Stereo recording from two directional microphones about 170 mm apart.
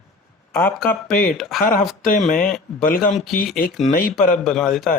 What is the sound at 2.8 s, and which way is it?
Speech, 55° left (ahead or behind).